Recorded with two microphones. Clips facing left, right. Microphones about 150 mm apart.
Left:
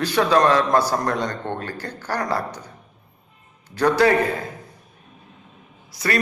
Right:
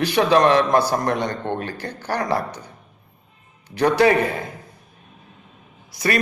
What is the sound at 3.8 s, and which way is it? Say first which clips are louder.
Speech: right 1 dB; 20° right (ahead or behind).